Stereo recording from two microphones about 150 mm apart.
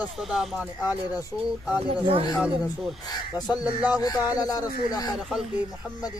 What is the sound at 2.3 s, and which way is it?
Speech, centre (ahead or behind).